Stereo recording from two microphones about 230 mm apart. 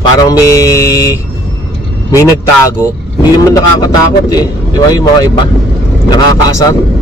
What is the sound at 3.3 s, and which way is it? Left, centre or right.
Speech, centre.